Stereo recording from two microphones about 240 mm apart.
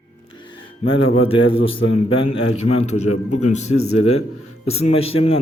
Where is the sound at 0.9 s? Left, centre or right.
Left.